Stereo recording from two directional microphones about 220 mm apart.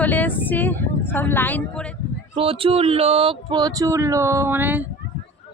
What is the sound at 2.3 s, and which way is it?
Speech, 25° right (ahead or behind).